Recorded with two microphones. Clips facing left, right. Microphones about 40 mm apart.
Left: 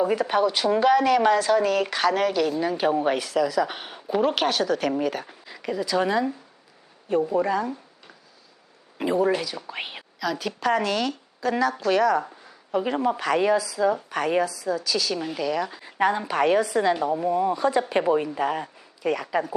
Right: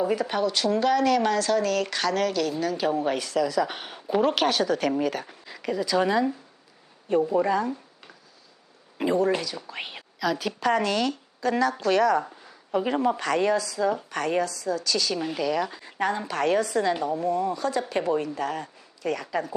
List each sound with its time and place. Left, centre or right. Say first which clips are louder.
0.0 s a woman's voice: left 3 dB; centre
10.2 s a woman's voice: right 1 dB; centre
16.0 s a woman's voice: left 4 dB; centre